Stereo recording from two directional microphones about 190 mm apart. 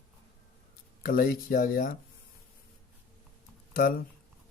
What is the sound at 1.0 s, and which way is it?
Speech, 50° left (ahead or behind).